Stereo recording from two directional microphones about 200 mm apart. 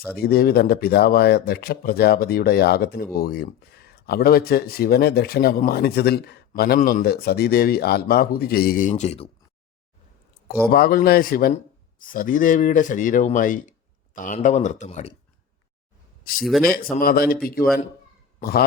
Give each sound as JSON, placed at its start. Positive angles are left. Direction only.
{"t": 0.2, "sound": "speech", "side_deg": 50}
{"t": 10.7, "sound": "a man's voice", "side_deg": 50}
{"t": 16.4, "sound": "speech", "side_deg": 0}
{"t": 16.6, "sound": "a man's voice", "side_deg": 45}